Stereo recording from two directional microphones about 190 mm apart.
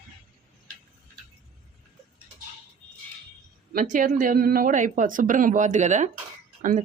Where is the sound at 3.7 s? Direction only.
45° right (ahead or behind).